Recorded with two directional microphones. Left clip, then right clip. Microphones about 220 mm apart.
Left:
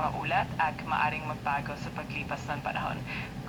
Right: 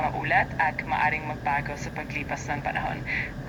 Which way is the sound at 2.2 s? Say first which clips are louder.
Right 4 dB; 40° left (ahead or behind).